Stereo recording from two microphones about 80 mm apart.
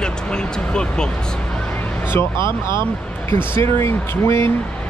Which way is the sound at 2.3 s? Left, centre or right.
Right.